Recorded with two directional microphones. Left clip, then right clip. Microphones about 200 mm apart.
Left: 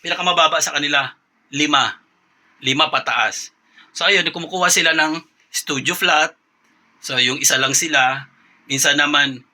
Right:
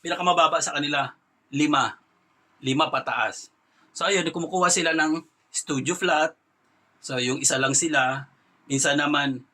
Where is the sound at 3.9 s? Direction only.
10° right (ahead or behind).